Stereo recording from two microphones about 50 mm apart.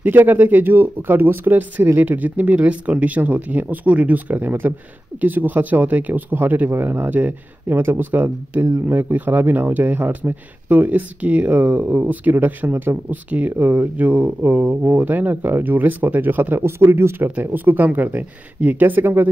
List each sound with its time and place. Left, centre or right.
0.0 s speech: right
16.6 s speech: right
17.2 s speech: right